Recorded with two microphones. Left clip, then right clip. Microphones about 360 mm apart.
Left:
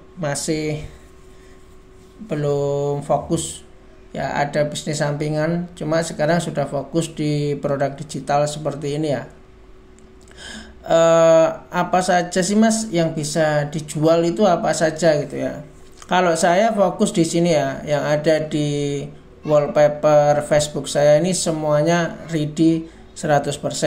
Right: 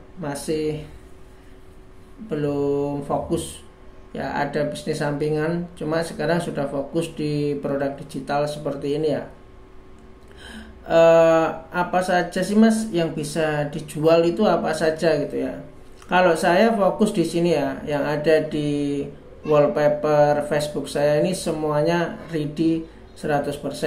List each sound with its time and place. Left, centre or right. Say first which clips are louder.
0.2 s speech: left 2 dB; left
2.5 s mantra: left 3 dB; left
4.1 s speech: left 3 dB; left
10.9 s speech: left 1 dB; centre